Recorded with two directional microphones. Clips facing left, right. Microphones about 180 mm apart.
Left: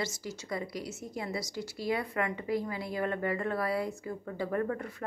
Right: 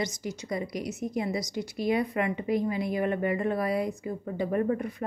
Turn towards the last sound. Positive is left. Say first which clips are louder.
# right 5 dB
turn(degrees=-20)  # may be behind; listen again after turning